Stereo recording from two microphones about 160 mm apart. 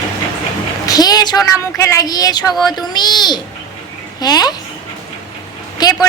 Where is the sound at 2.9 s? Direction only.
25° left (ahead or behind).